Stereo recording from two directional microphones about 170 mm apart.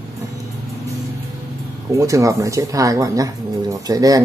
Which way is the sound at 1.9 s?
20° right (ahead or behind).